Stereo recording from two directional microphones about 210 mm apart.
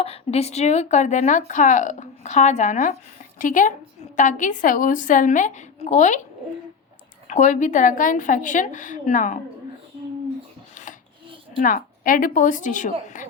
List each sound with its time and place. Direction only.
0.0 s speech: 30° left (ahead or behind)
7.3 s speech: 35° left (ahead or behind)
11.6 s speech: 40° left (ahead or behind)